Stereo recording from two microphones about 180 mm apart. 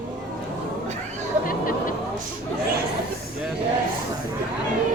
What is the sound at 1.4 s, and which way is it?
Hubbub, 50° left (ahead or behind).